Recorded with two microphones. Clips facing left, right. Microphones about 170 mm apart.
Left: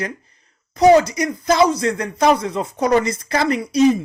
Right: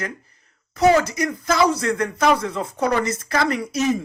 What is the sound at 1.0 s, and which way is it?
Speech, 15° left (ahead or behind).